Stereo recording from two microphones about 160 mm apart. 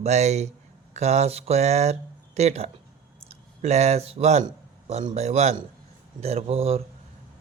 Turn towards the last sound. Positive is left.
turn(degrees=-40)  # may be behind; listen again after turning